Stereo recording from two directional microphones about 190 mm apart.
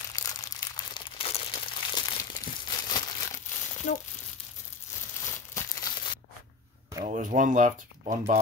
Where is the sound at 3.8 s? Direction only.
45° left (ahead or behind).